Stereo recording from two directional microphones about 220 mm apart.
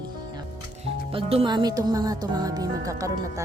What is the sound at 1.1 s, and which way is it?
Speech, 25° right (ahead or behind).